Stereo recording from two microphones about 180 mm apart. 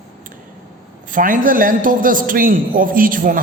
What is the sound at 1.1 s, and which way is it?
A man's voice, 50° right (ahead or behind).